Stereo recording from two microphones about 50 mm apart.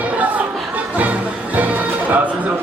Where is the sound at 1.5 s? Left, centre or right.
Right.